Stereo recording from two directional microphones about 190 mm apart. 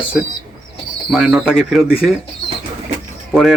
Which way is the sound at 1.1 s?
5° right (ahead or behind).